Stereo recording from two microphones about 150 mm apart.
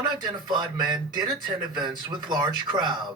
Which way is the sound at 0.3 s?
30° right (ahead or behind).